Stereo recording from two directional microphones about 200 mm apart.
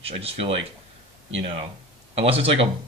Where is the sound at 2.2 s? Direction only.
30° right (ahead or behind).